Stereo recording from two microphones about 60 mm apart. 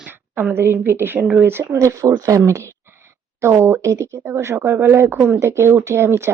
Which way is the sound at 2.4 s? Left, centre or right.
Right.